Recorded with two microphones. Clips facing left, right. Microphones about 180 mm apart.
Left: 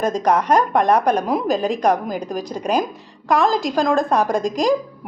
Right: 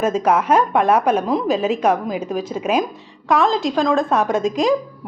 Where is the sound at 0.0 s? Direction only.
5° right (ahead or behind).